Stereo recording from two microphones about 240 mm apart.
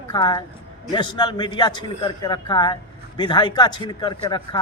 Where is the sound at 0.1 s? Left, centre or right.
Centre.